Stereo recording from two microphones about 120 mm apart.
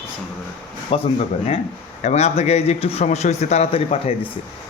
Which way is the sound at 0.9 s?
50° left (ahead or behind).